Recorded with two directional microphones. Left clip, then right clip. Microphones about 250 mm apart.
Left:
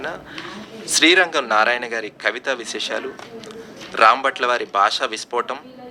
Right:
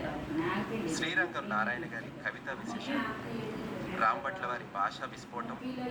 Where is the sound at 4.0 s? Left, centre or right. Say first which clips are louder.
Left 17 dB; left.